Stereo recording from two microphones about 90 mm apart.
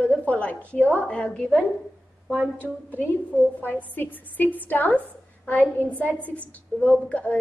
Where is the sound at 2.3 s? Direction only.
20° right (ahead or behind).